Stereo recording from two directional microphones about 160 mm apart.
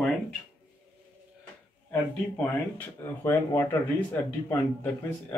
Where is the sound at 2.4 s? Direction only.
15° left (ahead or behind).